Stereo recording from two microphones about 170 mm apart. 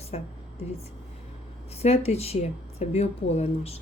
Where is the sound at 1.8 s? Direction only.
35° left (ahead or behind).